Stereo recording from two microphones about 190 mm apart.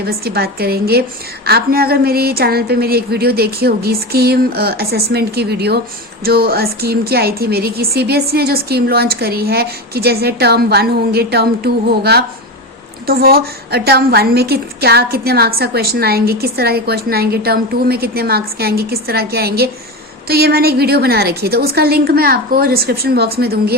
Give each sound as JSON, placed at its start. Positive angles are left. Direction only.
{"t": 0.0, "sound": "a woman's voice", "side_deg": -55}